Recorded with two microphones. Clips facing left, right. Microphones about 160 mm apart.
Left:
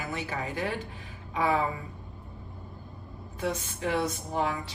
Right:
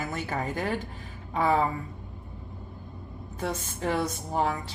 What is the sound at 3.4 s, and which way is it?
A woman's voice, 45° right (ahead or behind).